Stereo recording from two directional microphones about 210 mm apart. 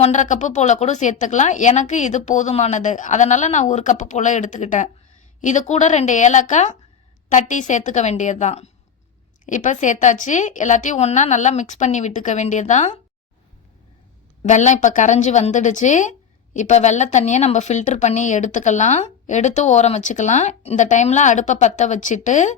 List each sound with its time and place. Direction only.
0.0 s a woman's voice: 35° left (ahead or behind)
14.4 s a woman's voice: 35° left (ahead or behind)